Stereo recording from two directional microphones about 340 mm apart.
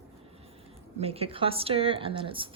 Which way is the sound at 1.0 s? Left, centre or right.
Centre.